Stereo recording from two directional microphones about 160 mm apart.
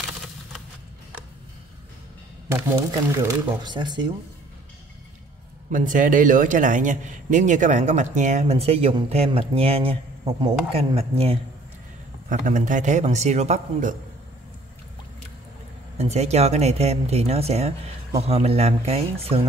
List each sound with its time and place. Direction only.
2.9 s speech: 20° right (ahead or behind)
5.7 s a man's voice: 55° right (ahead or behind); by 11.3 s 35° right (ahead or behind)
12.3 s a man's voice: 55° right (ahead or behind)
16.0 s speech: 40° right (ahead or behind)